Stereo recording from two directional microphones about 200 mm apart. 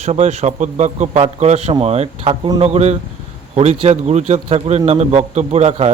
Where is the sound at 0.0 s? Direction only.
30° right (ahead or behind).